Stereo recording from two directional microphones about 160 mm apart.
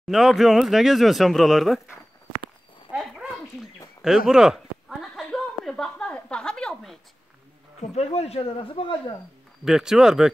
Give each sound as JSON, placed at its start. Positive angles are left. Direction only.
{"t": 0.1, "sound": "speech", "side_deg": 0}
{"t": 2.9, "sound": "dog", "side_deg": -5}
{"t": 4.3, "sound": "a sound", "side_deg": -5}
{"t": 7.9, "sound": "speech", "side_deg": 40}
{"t": 9.7, "sound": "speech", "side_deg": -5}